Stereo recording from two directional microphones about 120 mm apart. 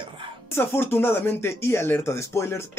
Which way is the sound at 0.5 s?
20° left (ahead or behind).